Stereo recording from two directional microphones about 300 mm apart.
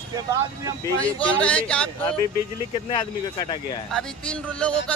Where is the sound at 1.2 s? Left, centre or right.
Centre.